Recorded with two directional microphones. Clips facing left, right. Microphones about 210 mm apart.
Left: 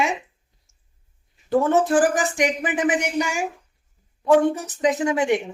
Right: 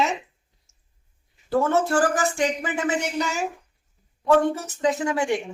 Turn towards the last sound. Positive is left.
turn(degrees=20)  # may be behind; listen again after turning